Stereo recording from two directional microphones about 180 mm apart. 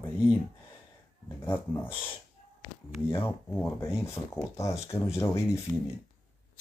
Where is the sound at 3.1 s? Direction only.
15° left (ahead or behind).